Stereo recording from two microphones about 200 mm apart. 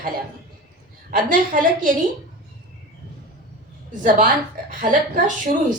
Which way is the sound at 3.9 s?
40° right (ahead or behind).